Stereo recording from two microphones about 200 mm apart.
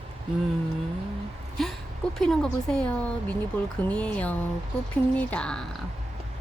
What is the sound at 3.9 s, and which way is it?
Music, 5° left (ahead or behind).